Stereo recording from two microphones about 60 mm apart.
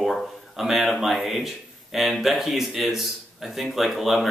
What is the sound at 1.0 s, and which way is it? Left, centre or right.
A man's voice, centre.